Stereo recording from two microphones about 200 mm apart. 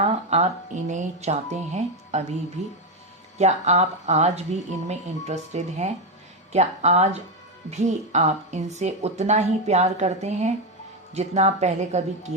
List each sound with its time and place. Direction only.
0.0 s speech: 35° right (ahead or behind)
3.3 s speech: 35° right (ahead or behind)